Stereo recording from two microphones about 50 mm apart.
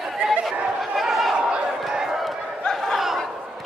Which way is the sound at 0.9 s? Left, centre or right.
Centre.